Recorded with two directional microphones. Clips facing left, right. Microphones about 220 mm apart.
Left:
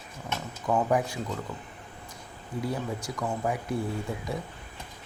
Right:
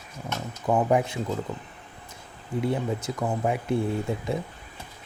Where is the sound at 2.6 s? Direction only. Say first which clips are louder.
Right 5 dB; 25° right (ahead or behind).